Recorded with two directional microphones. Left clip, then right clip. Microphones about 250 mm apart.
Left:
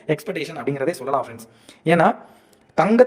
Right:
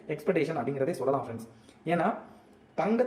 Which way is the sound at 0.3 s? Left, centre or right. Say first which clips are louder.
Left 3 dB; left.